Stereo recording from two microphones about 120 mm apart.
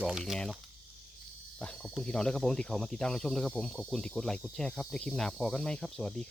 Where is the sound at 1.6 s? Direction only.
5° left (ahead or behind).